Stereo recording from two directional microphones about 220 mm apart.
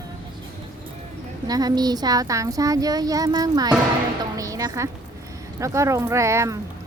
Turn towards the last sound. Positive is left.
turn(degrees=-15)  # may be behind; listen again after turning